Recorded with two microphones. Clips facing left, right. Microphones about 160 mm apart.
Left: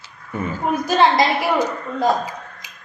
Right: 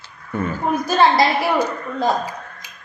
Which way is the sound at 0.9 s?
15° left (ahead or behind).